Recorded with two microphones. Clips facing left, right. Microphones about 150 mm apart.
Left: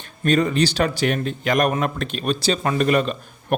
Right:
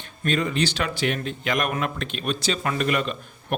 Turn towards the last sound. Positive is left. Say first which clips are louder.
# left 5 dB
turn(degrees=40)  # may be behind; listen again after turning